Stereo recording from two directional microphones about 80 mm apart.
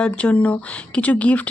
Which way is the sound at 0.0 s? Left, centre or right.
Centre.